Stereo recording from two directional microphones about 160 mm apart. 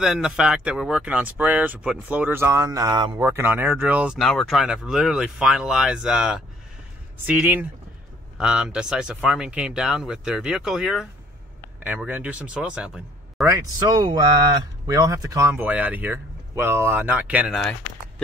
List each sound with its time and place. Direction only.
0.0 s speech: 5° right (ahead or behind)
13.5 s speech: 25° right (ahead or behind)